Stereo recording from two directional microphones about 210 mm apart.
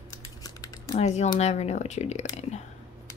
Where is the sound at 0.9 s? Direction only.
30° left (ahead or behind).